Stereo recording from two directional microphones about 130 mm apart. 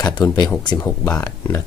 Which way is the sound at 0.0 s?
30° left (ahead or behind).